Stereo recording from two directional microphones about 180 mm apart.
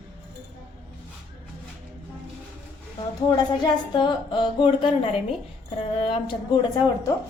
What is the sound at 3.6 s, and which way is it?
A woman's voice, 25° left (ahead or behind).